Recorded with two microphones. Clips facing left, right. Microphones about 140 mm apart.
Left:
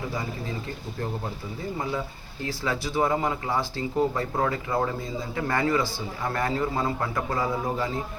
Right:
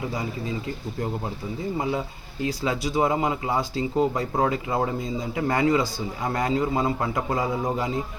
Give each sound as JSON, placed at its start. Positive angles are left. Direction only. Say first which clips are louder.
{"t": 2.4, "sound": "speech", "louder": "right 3 dB", "side_deg": -20}